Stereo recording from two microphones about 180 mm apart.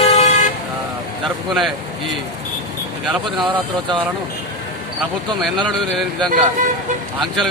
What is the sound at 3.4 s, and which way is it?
Speech, 25° right (ahead or behind).